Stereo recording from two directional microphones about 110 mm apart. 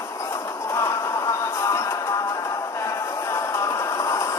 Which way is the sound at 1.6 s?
25° left (ahead or behind).